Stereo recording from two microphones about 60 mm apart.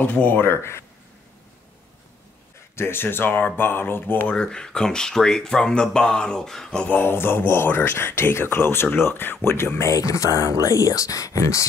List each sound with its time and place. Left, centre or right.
0.0 s speech: left
2.7 s speech: left
4.3 s speech: centre
7.0 s speech: left
9.8 s speech: left